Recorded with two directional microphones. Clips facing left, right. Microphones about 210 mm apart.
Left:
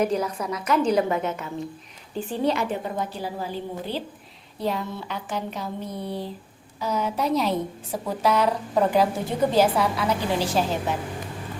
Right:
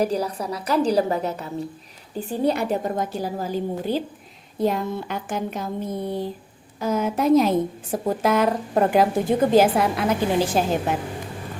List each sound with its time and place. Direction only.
0.0 s a woman's voice: 35° right (ahead or behind); by 10.9 s 50° right (ahead or behind)